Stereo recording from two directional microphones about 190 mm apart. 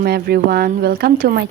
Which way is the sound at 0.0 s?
55° right (ahead or behind).